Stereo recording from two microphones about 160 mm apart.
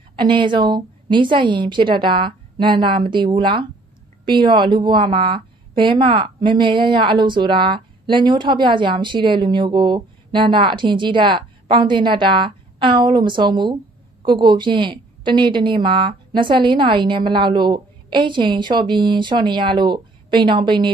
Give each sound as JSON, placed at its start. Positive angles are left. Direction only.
{"t": 0.2, "sound": "a woman's voice", "side_deg": -30}